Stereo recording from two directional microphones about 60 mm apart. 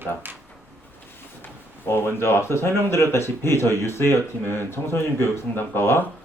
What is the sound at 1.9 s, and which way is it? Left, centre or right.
Speech, left.